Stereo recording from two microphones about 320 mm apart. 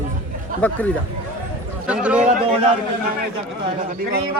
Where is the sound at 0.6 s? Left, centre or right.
Centre.